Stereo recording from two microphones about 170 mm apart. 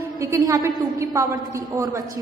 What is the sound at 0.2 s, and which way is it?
A woman's voice, 15° right (ahead or behind).